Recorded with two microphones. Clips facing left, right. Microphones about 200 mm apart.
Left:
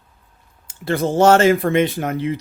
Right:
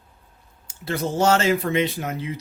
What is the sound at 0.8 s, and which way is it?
Speech, 55° left (ahead or behind).